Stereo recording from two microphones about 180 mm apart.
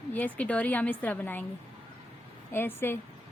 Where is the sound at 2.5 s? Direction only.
10° left (ahead or behind).